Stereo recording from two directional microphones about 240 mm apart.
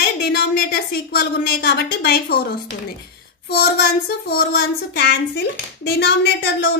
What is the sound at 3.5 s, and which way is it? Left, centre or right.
Child singing, left.